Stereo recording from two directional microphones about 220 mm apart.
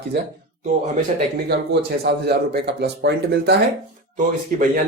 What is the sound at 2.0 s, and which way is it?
Speech, 45° right (ahead or behind).